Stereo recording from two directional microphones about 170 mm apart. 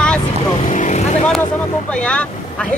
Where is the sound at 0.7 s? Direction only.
45° left (ahead or behind).